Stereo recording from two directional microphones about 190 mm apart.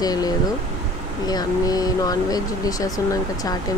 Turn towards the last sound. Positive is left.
turn(degrees=20)  # may be behind; listen again after turning